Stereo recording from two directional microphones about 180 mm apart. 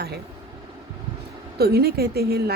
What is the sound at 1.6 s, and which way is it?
Speech, 60° right (ahead or behind).